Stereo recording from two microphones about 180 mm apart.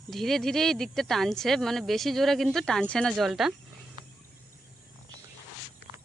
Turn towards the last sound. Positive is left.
turn(degrees=-25)  # may be behind; listen again after turning